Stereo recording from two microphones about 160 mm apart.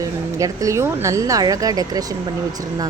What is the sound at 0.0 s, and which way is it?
Speech, 20° right (ahead or behind).